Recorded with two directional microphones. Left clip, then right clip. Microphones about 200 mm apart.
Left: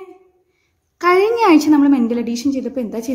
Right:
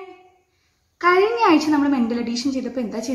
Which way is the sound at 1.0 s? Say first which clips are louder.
Left 3 dB; 50° left (ahead or behind).